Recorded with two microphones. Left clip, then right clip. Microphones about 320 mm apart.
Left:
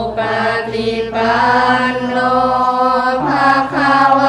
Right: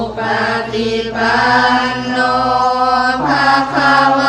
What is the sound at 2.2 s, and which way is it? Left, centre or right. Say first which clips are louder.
Chant: even; left.